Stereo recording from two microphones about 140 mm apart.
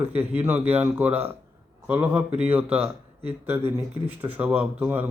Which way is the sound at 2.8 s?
45° right (ahead or behind).